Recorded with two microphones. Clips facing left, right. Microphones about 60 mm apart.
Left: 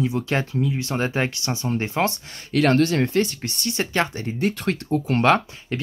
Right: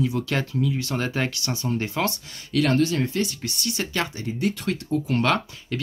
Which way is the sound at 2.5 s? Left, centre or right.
Left.